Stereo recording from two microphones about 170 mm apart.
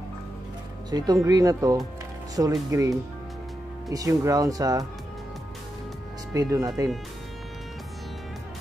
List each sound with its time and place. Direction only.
0.8 s speech: 25° right (ahead or behind)
6.3 s speech: 20° right (ahead or behind)